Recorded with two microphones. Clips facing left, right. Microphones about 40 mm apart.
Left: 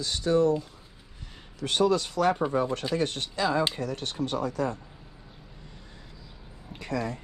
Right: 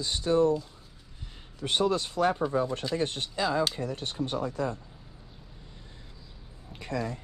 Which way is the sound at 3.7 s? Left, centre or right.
Left.